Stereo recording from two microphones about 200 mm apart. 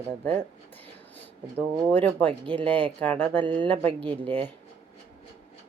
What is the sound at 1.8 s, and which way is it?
Speech, 10° left (ahead or behind).